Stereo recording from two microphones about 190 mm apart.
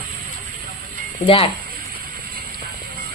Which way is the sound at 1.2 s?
30° left (ahead or behind).